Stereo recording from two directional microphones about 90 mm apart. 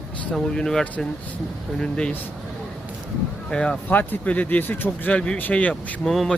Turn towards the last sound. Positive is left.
turn(degrees=0)  # may be behind; listen again after turning